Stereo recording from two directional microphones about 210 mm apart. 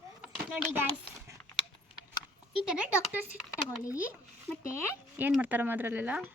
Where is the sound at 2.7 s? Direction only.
5° right (ahead or behind).